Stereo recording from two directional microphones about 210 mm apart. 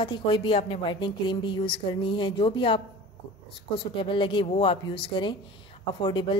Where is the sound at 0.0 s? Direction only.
25° left (ahead or behind).